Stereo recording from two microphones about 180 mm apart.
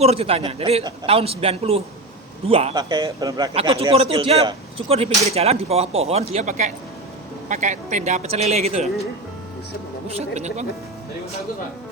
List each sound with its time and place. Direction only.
0.0 s a man's voice: 35° right (ahead or behind)
3.5 s speech: 35° right (ahead or behind)
10.1 s speech: 35° right (ahead or behind)